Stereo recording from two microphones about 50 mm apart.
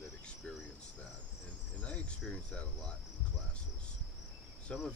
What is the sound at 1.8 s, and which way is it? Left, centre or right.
Cricket, left.